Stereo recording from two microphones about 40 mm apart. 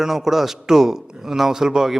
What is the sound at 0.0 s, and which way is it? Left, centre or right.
A man's voice, centre.